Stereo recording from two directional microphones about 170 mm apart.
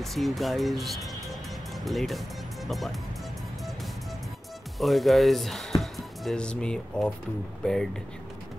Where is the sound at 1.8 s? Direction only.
Centre (ahead or behind).